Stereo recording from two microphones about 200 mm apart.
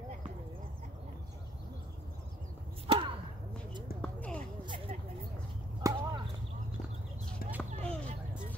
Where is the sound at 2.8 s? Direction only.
25° right (ahead or behind).